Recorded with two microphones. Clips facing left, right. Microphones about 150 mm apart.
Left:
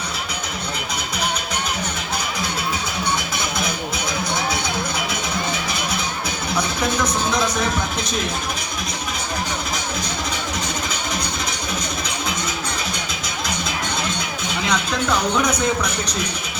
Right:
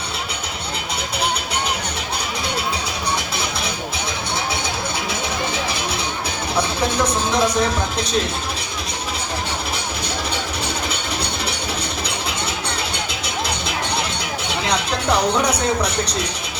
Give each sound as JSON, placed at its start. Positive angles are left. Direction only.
{"t": 6.6, "sound": "speech", "side_deg": -30}
{"t": 14.7, "sound": "speech", "side_deg": -35}